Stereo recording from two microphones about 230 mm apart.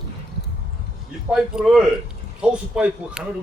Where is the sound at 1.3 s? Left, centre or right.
Centre.